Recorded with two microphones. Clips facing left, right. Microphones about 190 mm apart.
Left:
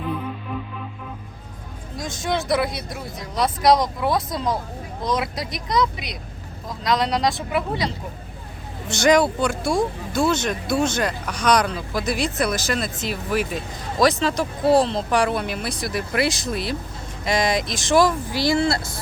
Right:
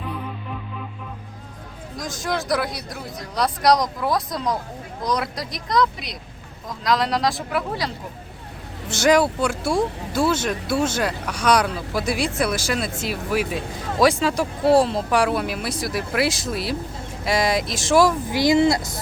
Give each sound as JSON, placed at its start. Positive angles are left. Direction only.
{"t": 2.0, "sound": "speech", "side_deg": 0}
{"t": 18.3, "sound": "speech", "side_deg": -20}